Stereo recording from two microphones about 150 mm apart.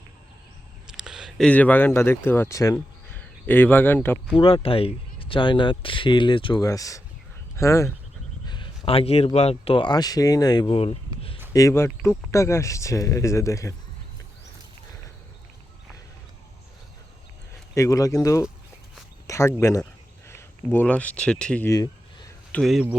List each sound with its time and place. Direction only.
0.9 s a sound: 5° right (ahead or behind)
1.5 s speech: 10° left (ahead or behind)
4.4 s speech: 35° left (ahead or behind); by 7.9 s 20° left (ahead or behind)
8.4 s speech: 30° left (ahead or behind)
11.5 s speech: 20° left (ahead or behind)
17.7 s speech: 20° left (ahead or behind); by 21.7 s 5° left (ahead or behind)
21.7 s a sound: 25° left (ahead or behind)
22.5 s speech: centre (ahead or behind)